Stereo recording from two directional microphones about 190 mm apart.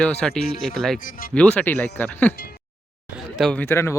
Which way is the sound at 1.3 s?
5° left (ahead or behind).